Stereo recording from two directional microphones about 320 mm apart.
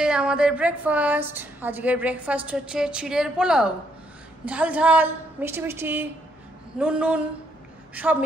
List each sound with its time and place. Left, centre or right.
0.0 s a woman's voice: centre